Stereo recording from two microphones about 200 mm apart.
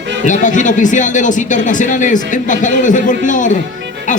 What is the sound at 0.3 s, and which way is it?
Speech, 40° left (ahead or behind).